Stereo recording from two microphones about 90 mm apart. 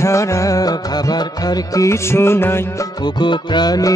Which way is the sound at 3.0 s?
55° left (ahead or behind).